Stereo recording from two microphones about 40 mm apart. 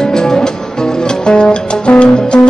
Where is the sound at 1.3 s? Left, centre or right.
Left.